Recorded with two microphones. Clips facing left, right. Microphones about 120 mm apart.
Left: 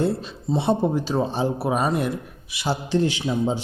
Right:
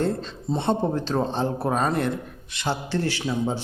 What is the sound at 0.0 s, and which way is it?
A man's voice, 10° left (ahead or behind).